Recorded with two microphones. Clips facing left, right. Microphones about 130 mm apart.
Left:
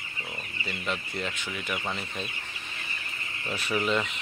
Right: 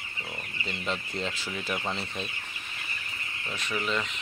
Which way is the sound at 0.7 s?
25° right (ahead or behind).